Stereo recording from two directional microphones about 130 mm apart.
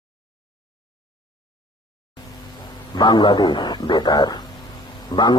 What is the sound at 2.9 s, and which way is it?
Speech, 35° left (ahead or behind).